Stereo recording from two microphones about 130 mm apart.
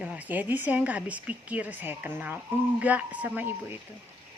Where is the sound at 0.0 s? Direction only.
10° right (ahead or behind).